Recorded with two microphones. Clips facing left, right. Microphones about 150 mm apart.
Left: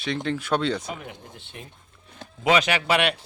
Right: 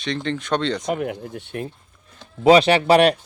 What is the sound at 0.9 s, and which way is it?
Speech, 65° right (ahead or behind).